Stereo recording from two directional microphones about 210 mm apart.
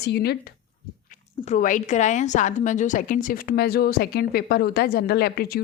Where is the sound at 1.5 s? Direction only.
35° left (ahead or behind).